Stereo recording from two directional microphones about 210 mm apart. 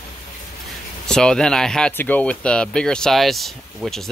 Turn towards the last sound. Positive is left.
turn(degrees=0)  # may be behind; listen again after turning